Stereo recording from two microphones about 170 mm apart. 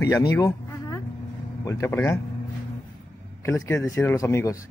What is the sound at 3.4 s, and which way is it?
Speech, 15° left (ahead or behind).